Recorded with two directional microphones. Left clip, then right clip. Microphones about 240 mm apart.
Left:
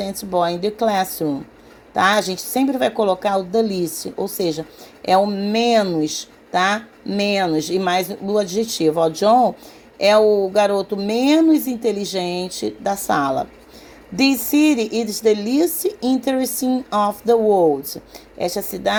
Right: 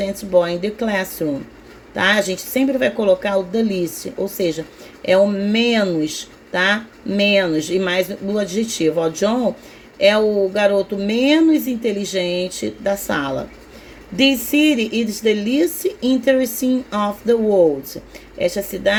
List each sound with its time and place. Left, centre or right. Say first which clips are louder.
0.0 s a woman's voice: right 3 dB; centre